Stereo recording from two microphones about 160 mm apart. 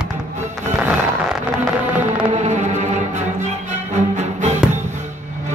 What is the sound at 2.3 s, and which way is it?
Music, 45° right (ahead or behind).